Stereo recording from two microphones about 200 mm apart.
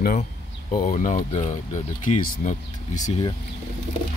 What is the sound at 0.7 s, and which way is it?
Speech, 40° left (ahead or behind).